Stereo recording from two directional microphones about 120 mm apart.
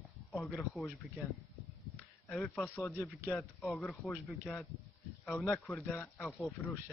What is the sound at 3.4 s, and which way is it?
Speech, 5° left (ahead or behind).